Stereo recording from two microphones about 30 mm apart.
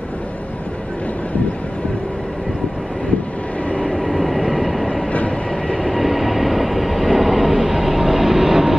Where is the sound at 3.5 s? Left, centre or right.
Left.